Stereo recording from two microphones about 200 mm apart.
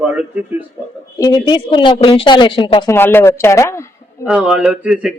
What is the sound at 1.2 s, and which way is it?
Speech, 20° left (ahead or behind).